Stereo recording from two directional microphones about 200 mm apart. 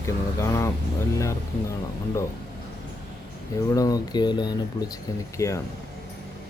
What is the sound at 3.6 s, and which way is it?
Speech, 15° left (ahead or behind).